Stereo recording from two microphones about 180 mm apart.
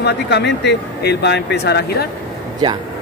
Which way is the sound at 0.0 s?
70° left (ahead or behind).